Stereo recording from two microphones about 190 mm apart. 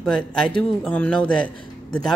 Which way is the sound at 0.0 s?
5° left (ahead or behind).